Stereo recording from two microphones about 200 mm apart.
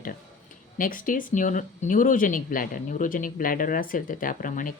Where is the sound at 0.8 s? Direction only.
45° left (ahead or behind).